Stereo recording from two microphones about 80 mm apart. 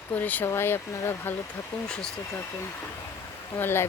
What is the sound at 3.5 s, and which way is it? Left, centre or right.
Speech, left.